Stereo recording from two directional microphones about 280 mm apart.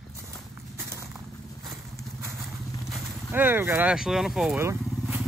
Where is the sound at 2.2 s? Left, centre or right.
Centre.